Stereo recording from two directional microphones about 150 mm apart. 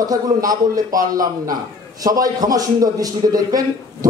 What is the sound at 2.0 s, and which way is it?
A man's voice, 25° right (ahead or behind).